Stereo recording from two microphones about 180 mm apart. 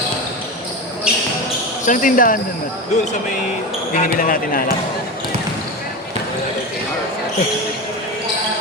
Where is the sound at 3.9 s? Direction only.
50° left (ahead or behind).